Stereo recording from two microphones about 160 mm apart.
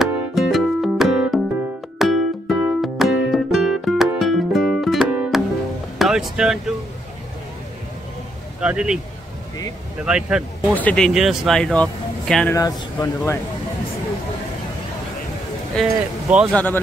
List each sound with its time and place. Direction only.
0.0 s music: centre (ahead or behind)
8.5 s speech: 5° right (ahead or behind)
10.0 s speech: 5° right (ahead or behind)
10.7 s speech: 10° left (ahead or behind)
11.1 s speech: centre (ahead or behind)
12.5 s speech: 20° left (ahead or behind)
15.7 s speech: 5° right (ahead or behind)
16.5 s speech: 10° left (ahead or behind)